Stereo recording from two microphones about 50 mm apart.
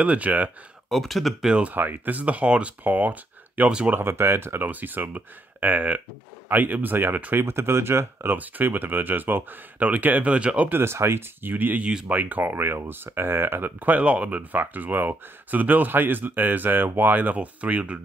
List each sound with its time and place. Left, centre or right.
0.0 s speech: right
0.8 s speech: centre
1.6 s speech: right
2.8 s speech: right
3.9 s speech: right
4.6 s speech: right
7.3 s speech: right
8.4 s speech: right
10.7 s speech: right
11.4 s speech: right
11.8 s speech: centre
12.1 s speech: right